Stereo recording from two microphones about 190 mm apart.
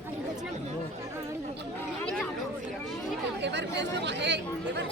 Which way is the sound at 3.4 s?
65° right (ahead or behind).